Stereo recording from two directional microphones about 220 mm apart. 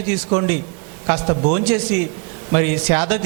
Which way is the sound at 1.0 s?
25° right (ahead or behind).